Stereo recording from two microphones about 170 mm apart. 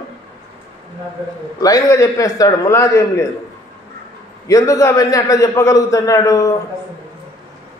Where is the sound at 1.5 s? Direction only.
20° left (ahead or behind).